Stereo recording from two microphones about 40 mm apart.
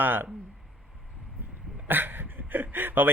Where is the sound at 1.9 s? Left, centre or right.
Right.